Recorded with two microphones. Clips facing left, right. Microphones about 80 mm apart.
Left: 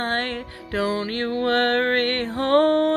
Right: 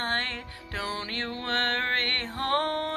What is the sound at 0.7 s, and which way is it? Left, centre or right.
Music, left.